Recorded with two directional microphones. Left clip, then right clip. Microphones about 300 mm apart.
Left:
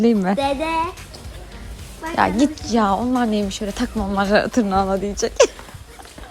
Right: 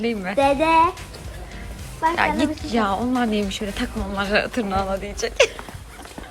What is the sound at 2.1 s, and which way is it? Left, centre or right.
A woman's voice, centre.